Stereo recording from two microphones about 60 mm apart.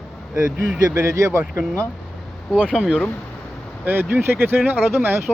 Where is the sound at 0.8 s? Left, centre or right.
Right.